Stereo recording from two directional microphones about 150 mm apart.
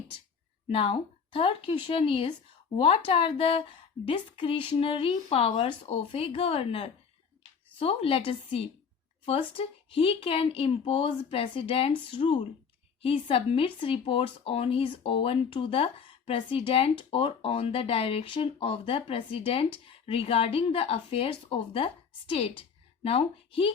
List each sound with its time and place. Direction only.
0.7 s speech: 35° left (ahead or behind)